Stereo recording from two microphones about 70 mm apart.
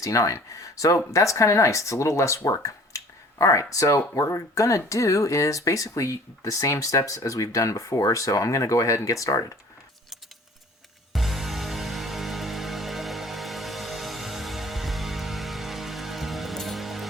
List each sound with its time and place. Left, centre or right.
0.0 s speech: left
11.1 s music: centre